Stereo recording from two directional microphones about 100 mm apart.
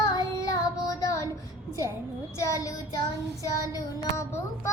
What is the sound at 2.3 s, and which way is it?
Child singing, 35° left (ahead or behind).